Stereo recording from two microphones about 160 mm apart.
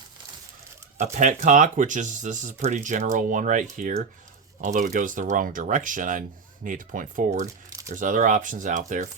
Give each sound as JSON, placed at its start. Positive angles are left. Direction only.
{"t": 0.9, "sound": "speech", "side_deg": -50}
{"t": 7.7, "sound": "crumpling", "side_deg": -20}
{"t": 7.9, "sound": "speech", "side_deg": -55}